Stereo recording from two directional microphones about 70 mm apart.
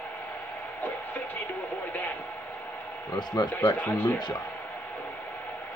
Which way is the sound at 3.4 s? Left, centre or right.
Left.